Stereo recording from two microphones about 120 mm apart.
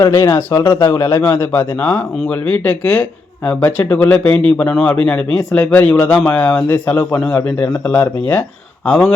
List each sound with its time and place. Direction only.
0.0 s a man's voice: 25° left (ahead or behind); by 9.1 s 10° left (ahead or behind)